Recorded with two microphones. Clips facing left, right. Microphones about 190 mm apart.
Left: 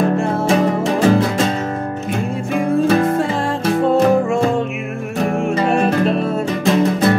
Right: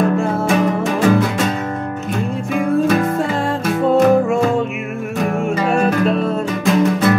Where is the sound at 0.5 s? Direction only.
30° left (ahead or behind).